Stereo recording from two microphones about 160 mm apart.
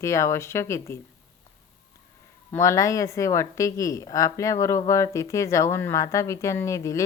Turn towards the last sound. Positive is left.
turn(degrees=20)  # may be behind; listen again after turning